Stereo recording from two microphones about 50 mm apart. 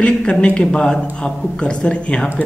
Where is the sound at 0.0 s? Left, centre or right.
Left.